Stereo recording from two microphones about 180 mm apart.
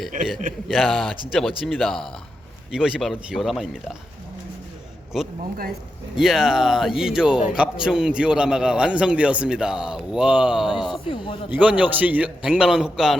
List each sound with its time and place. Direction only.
0.7 s a man's voice: centre (ahead or behind)
6.1 s a man's voice: centre (ahead or behind)
11.1 s speech: 25° left (ahead or behind)
11.5 s a man's voice: 10° right (ahead or behind)